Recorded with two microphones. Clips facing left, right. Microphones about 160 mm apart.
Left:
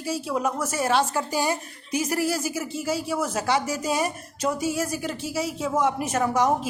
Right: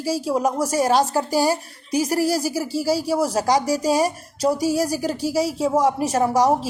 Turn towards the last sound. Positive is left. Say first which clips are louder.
# right 4 dB
turn(degrees=-30)  # may be behind; listen again after turning